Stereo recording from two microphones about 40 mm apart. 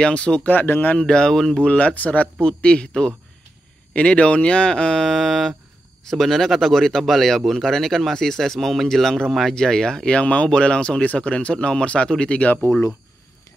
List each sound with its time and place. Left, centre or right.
0.0 s speech: left
0.5 s speech: left
0.9 s speech: left
1.6 s speech: left